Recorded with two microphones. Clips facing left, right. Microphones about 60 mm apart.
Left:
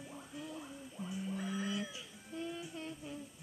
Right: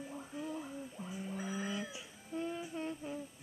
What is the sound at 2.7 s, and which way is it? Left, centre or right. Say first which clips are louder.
Humming: right 4 dB; right.